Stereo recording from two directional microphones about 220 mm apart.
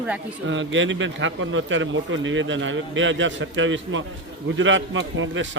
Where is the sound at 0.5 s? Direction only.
60° right (ahead or behind).